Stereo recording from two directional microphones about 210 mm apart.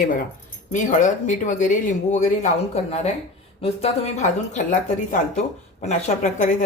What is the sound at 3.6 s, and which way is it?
A woman's voice, 30° left (ahead or behind).